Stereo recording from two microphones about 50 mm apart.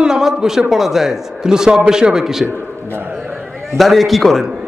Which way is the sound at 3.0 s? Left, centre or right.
Right.